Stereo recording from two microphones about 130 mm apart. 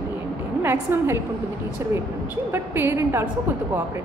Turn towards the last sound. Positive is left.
turn(degrees=-20)  # may be behind; listen again after turning